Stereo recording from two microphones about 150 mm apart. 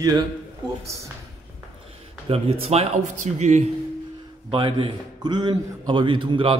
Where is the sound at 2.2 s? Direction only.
40° right (ahead or behind).